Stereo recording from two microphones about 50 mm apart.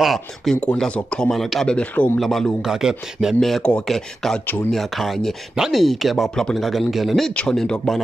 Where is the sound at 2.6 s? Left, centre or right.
Centre.